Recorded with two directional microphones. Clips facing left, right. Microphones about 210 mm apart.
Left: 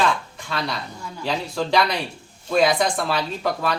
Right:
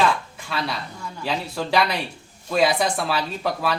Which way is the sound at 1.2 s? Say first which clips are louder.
Left 2 dB; 5° right (ahead or behind).